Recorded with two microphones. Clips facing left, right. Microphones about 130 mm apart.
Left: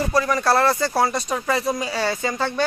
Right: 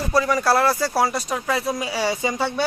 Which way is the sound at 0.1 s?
5° right (ahead or behind).